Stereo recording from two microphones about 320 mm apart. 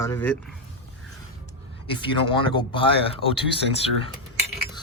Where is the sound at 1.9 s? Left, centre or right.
Centre.